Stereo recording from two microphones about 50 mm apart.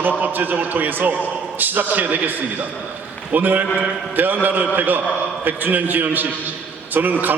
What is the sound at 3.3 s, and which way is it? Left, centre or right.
A man's voice, right.